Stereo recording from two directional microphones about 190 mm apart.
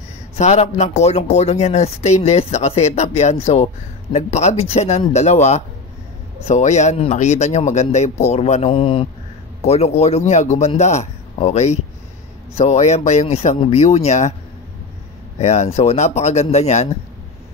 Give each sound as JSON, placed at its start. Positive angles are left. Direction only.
{"t": 0.4, "sound": "a man's voice", "side_deg": 35}
{"t": 15.3, "sound": "speech", "side_deg": 35}